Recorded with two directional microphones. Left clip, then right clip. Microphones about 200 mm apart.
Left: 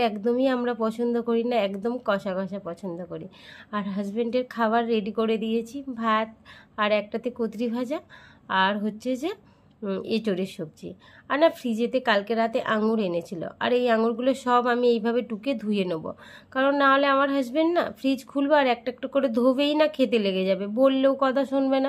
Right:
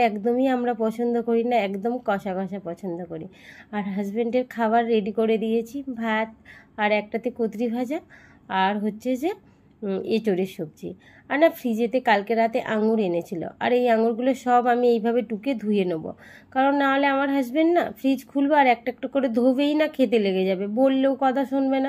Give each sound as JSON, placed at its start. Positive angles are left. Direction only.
{"t": 0.0, "sound": "a woman's voice", "side_deg": 0}
{"t": 10.3, "sound": "a woman's voice", "side_deg": 5}